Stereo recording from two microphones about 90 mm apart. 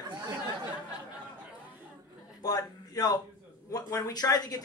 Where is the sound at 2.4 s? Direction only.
45° left (ahead or behind).